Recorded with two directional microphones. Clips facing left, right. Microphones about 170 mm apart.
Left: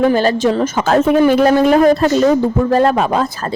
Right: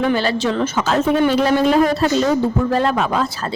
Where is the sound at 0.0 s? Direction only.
45° left (ahead or behind).